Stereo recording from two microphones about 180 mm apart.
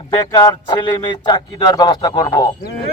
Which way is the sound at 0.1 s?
20° left (ahead or behind).